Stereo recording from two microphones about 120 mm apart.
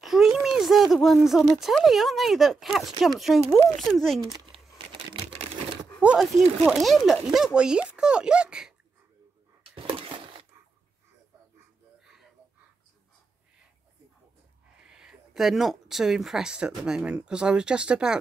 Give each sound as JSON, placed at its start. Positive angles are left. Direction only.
{"t": 0.0, "sound": "a sound", "side_deg": 0}
{"t": 1.6, "sound": "speech", "side_deg": 0}
{"t": 4.3, "sound": "crumpling", "side_deg": -45}
{"t": 6.0, "sound": "speech", "side_deg": -5}
{"t": 9.6, "sound": "a sound", "side_deg": -45}
{"t": 14.8, "sound": "speech", "side_deg": -5}